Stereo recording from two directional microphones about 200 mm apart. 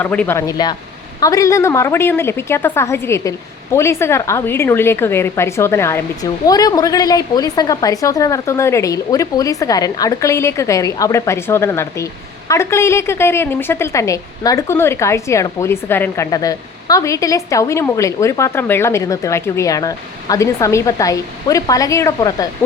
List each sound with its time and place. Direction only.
0.0 s a woman's voice: 10° left (ahead or behind)